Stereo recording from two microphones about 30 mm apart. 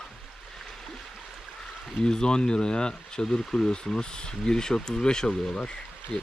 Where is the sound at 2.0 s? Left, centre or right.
Left.